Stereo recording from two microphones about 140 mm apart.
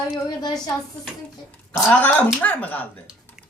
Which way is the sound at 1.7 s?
15° left (ahead or behind).